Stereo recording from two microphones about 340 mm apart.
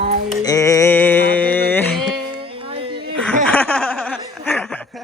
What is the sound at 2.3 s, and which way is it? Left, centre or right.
Music, centre.